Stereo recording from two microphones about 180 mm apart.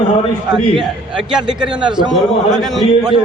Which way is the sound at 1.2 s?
5° right (ahead or behind).